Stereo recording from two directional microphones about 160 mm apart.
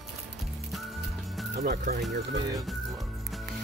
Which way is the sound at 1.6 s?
60° right (ahead or behind).